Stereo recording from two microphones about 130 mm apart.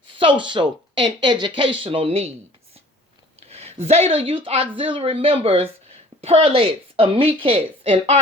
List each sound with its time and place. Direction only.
0.2 s speech: 40° right (ahead or behind)
3.4 s speech: 55° right (ahead or behind)